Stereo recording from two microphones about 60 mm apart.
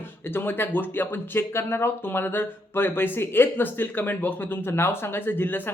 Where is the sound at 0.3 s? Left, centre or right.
Left.